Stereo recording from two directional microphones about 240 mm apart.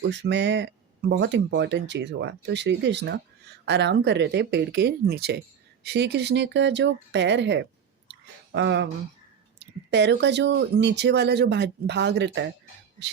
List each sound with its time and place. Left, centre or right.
0.1 s speech: right